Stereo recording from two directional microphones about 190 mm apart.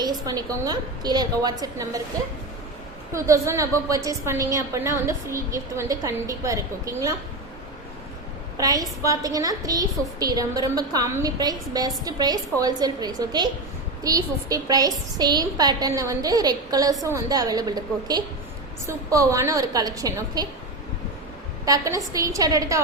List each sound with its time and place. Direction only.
0.0 s a woman's voice: 20° right (ahead or behind)
3.1 s a woman's voice: 15° right (ahead or behind)
8.5 s a woman's voice: 20° right (ahead or behind)
21.6 s a woman's voice: 20° right (ahead or behind)